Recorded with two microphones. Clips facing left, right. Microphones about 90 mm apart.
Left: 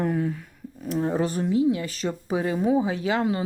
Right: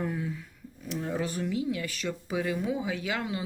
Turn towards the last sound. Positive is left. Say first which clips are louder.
# left 8 dB
turn(degrees=35)  # may be behind; listen again after turning